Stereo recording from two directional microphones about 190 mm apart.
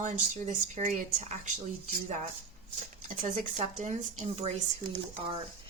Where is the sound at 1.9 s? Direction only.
50° right (ahead or behind).